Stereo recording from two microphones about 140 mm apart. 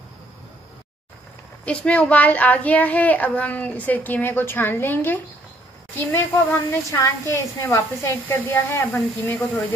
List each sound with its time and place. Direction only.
1.7 s a child's voice: 10° left (ahead or behind)